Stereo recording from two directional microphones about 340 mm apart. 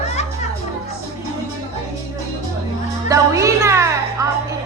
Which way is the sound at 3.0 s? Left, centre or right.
Centre.